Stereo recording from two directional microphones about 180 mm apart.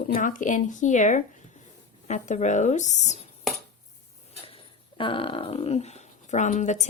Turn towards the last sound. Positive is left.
turn(degrees=40)  # may be behind; listen again after turning